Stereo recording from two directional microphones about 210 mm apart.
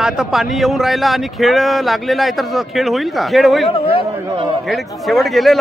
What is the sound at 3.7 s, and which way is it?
Speech, 25° left (ahead or behind).